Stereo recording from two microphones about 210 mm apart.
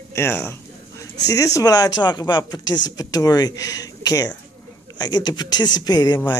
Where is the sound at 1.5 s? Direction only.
20° left (ahead or behind).